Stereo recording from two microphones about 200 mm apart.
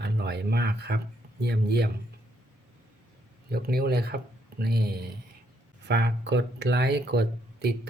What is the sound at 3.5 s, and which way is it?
Speech, 50° right (ahead or behind).